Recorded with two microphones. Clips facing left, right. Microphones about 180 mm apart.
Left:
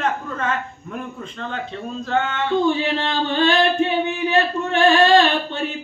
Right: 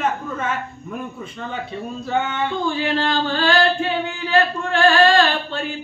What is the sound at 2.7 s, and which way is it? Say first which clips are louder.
Chant: even; 20° left (ahead or behind).